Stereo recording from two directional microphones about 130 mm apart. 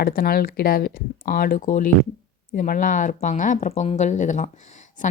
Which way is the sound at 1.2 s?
90° left.